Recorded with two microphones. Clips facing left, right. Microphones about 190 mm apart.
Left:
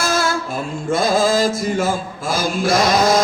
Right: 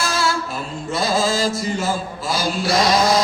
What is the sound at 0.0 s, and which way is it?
Music, 50° left (ahead or behind).